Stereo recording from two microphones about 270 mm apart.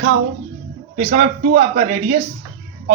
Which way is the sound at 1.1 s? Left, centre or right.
Right.